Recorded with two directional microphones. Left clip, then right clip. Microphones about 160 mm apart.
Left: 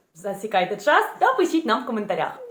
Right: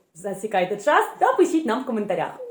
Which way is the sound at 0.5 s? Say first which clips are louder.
Even; centre (ahead or behind).